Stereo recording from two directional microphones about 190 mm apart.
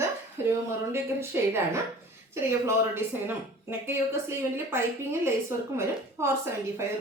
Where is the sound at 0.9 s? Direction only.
15° right (ahead or behind).